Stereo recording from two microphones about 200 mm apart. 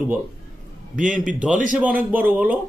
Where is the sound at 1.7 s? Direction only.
10° right (ahead or behind).